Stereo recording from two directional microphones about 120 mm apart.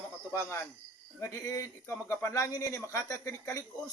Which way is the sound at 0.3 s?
25° left (ahead or behind).